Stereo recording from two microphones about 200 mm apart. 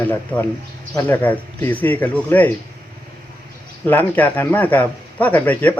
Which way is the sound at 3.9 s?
10° left (ahead or behind).